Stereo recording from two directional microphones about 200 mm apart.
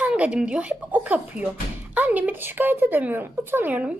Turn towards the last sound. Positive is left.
turn(degrees=-10)  # may be behind; listen again after turning